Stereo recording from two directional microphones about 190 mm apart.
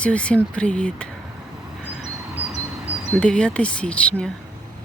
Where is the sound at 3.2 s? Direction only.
5° left (ahead or behind).